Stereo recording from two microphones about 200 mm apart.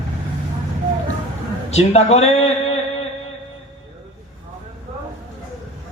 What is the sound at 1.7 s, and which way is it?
A man's voice, 30° left (ahead or behind).